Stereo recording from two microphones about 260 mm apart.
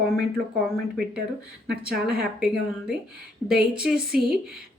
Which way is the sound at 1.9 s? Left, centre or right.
Right.